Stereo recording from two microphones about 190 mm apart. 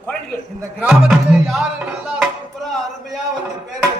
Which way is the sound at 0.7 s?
5° right (ahead or behind).